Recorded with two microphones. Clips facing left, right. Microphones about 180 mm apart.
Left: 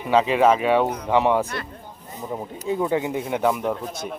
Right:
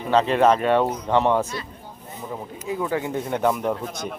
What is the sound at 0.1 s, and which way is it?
Speech, 10° left (ahead or behind).